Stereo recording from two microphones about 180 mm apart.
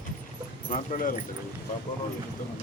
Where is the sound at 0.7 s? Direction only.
50° left (ahead or behind).